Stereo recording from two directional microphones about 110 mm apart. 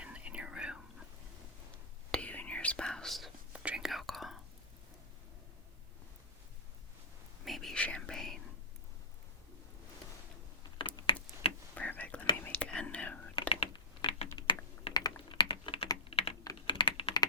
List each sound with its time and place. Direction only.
0.0 s whispering: 10° right (ahead or behind)
2.1 s whispering: 10° left (ahead or behind)
3.5 s whispering: 10° right (ahead or behind)
7.4 s whispering: centre (ahead or behind)
10.8 s a sound: 50° left (ahead or behind)
11.7 s whispering: 15° left (ahead or behind)
13.5 s typing: 50° left (ahead or behind)
16.0 s typing: 65° left (ahead or behind)
16.6 s computer keyboard: 50° left (ahead or behind)